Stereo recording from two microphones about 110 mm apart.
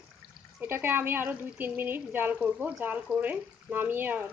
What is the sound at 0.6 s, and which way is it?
A woman's voice, 20° right (ahead or behind).